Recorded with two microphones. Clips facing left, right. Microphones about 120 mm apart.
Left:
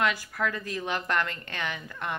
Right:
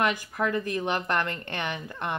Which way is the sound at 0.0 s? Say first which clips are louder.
Right 2 dB; 20° right (ahead or behind).